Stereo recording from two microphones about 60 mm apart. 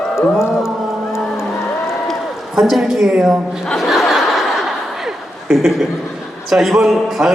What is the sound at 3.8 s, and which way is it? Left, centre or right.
Chuckle, centre.